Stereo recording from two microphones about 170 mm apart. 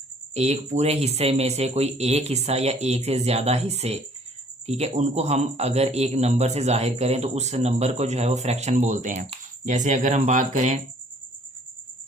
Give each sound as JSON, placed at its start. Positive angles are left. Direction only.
{"t": 0.3, "sound": "speech", "side_deg": -40}